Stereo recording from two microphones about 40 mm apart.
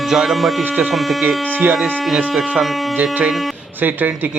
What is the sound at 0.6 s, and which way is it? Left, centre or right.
Speech, right.